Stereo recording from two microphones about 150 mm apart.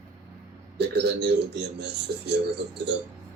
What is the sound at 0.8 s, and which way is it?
Speech, 90° right.